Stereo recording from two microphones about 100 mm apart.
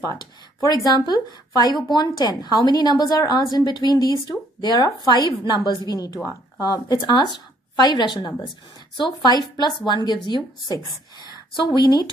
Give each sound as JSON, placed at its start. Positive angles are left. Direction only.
{"t": 0.6, "sound": "a woman's voice", "side_deg": 40}